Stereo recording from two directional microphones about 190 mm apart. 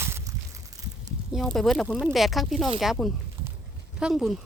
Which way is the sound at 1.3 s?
Centre (ahead or behind).